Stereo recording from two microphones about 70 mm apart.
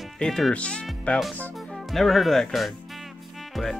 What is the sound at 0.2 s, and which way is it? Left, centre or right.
Speech, centre.